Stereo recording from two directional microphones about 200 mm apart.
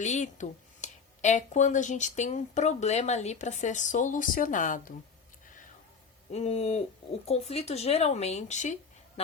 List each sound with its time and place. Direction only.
0.0 s speech: 35° left (ahead or behind)
6.3 s speech: 30° left (ahead or behind)